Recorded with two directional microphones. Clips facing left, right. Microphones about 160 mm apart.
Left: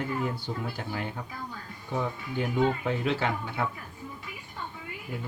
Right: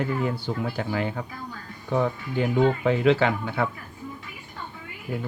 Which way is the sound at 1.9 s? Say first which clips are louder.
Right 6 dB; 80° right.